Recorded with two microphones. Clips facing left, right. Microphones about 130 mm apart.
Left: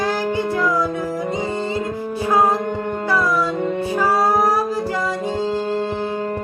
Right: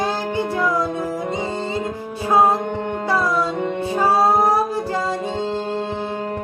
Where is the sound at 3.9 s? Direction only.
25° right (ahead or behind).